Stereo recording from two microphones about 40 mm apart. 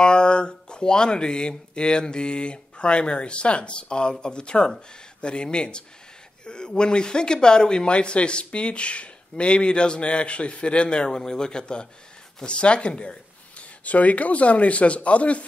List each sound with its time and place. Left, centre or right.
0.0 s speech: left
13.8 s speech: left